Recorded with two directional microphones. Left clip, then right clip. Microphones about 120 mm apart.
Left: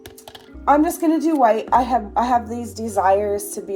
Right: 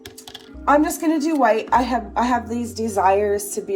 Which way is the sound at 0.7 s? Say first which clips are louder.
Left 1 dB; 30° left (ahead or behind).